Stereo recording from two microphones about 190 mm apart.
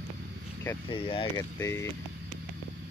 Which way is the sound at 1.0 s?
30° left (ahead or behind).